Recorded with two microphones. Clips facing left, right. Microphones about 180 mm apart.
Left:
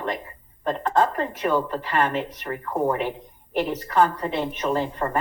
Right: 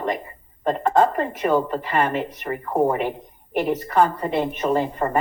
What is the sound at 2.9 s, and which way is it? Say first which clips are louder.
Speech: right 2 dB; 50° right (ahead or behind).